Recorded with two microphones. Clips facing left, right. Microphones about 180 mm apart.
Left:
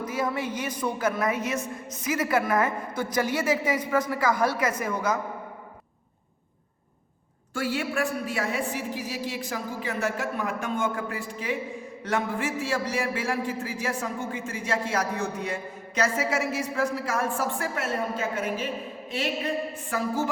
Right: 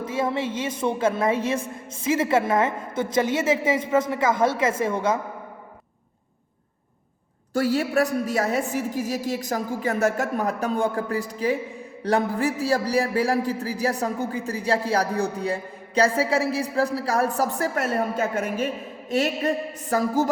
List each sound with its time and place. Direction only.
0.0 s a woman's voice: 25° right (ahead or behind)
7.5 s a man's voice: 40° right (ahead or behind)